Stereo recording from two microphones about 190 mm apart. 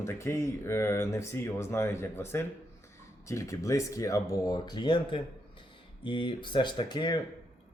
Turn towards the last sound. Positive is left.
turn(degrees=20)  # may be behind; listen again after turning